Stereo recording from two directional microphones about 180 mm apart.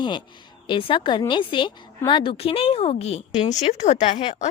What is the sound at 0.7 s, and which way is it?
A woman's voice, 30° left (ahead or behind).